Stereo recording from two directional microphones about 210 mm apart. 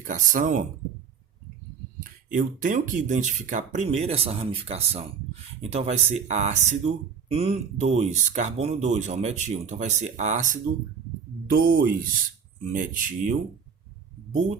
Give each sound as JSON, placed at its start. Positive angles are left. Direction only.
{"t": 0.0, "sound": "speech", "side_deg": -40}
{"t": 2.3, "sound": "speech", "side_deg": -40}